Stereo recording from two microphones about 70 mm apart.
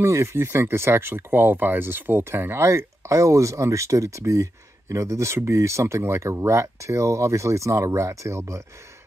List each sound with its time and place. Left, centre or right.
0.0 s speech: right